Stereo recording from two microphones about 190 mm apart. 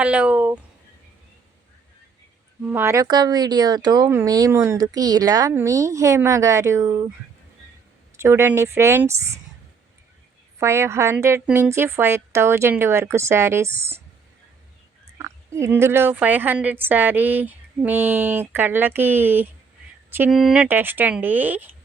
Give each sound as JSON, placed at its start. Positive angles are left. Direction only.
{"t": 0.0, "sound": "speech", "side_deg": -5}
{"t": 2.6, "sound": "speech", "side_deg": -10}
{"t": 8.1, "sound": "speech", "side_deg": -15}
{"t": 10.6, "sound": "speech", "side_deg": -15}
{"t": 15.2, "sound": "speech", "side_deg": -15}